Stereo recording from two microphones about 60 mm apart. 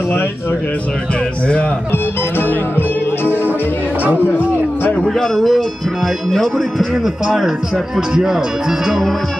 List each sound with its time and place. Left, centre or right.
1.9 s speech: left
5.0 s speech: centre
7.2 s speech: centre